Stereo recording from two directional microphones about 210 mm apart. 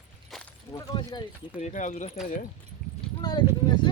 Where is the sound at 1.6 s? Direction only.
35° left (ahead or behind).